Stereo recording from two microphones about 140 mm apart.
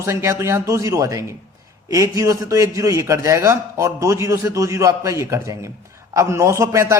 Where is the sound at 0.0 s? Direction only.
20° right (ahead or behind).